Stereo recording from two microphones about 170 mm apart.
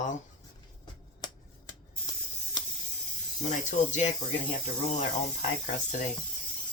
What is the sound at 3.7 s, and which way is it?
Speech, 45° left (ahead or behind).